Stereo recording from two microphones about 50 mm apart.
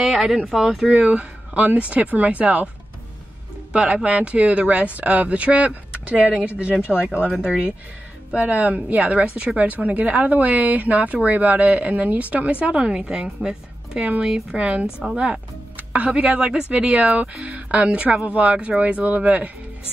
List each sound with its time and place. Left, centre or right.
0.0 s a sound: centre
0.5 s a woman's voice: centre
0.8 s speech: right
3.7 s speech: right
6.9 s speech: centre
7.4 s a woman's voice: centre
8.3 s a woman's voice: right
14.6 s speech: right